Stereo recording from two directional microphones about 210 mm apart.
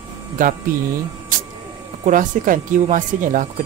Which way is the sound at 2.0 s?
40° right (ahead or behind).